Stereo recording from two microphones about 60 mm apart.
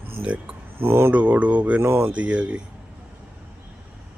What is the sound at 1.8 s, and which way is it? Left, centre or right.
Speech, right.